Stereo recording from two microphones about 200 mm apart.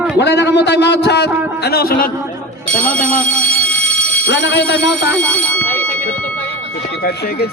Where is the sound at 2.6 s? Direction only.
10° left (ahead or behind).